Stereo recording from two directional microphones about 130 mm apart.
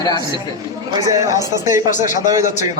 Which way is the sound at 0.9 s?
25° right (ahead or behind).